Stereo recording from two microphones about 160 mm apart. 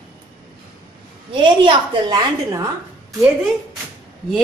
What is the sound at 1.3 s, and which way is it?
A woman's voice, 30° right (ahead or behind).